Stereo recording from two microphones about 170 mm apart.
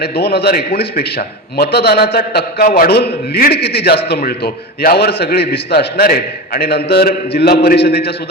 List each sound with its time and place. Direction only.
0.0 s a man's voice: 75° left (ahead or behind)